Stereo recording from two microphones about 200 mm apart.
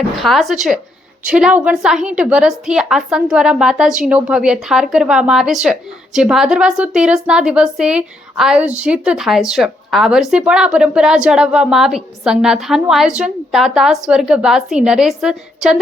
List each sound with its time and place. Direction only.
0.2 s a woman's voice: centre (ahead or behind)